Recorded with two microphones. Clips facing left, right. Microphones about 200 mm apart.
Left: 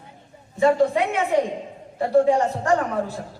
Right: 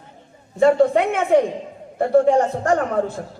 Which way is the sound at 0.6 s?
50° right (ahead or behind).